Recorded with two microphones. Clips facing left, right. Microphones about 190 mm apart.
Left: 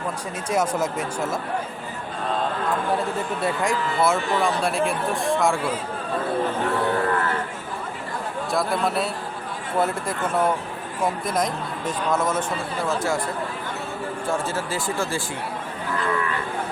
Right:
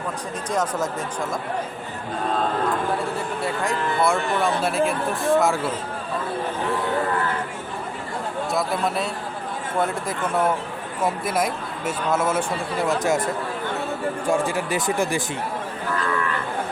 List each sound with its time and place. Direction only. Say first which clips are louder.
0.5 s speech: left 2 dB; 10° left (ahead or behind)
4.0 s speech: even; centre (ahead or behind)
8.4 s speech: left 1 dB; centre (ahead or behind); by 13.2 s 20° right (ahead or behind)
14.3 s speech: right 4 dB; 15° right (ahead or behind)